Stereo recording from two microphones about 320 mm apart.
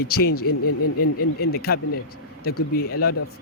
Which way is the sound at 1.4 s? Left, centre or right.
Left.